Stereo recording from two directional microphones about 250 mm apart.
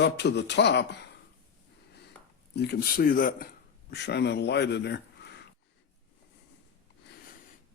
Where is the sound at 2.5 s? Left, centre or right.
Left.